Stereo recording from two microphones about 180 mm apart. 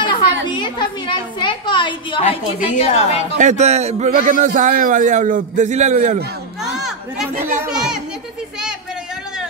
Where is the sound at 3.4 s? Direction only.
40° right (ahead or behind).